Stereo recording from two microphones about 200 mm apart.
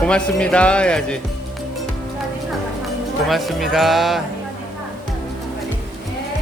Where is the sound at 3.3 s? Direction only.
Centre (ahead or behind).